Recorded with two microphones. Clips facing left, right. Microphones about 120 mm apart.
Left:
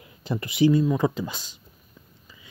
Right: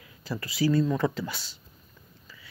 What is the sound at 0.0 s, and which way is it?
Speech, 25° left (ahead or behind).